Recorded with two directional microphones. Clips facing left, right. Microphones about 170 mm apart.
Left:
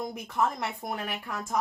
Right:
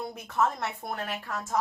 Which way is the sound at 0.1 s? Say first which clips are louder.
Right 1 dB; 10° left (ahead or behind).